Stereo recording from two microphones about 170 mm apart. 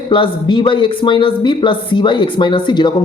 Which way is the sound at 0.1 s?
30° left (ahead or behind).